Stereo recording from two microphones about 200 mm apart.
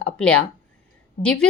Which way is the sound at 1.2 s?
30° left (ahead or behind).